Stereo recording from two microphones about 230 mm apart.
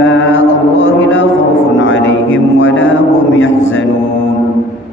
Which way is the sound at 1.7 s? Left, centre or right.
Left.